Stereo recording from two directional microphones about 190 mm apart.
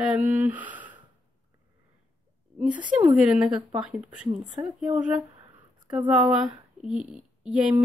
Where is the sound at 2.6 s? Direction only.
25° right (ahead or behind).